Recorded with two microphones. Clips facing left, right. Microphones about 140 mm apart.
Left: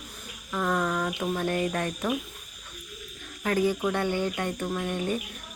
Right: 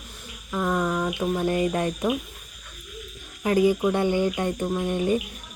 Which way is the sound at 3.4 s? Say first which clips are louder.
Right 5 dB; 15° right (ahead or behind).